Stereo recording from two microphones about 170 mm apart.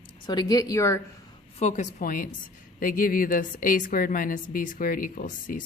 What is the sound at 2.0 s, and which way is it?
A woman's voice, 55° left (ahead or behind).